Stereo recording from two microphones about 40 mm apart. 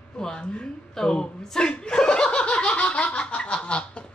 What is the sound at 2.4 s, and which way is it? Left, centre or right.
Laughter, left.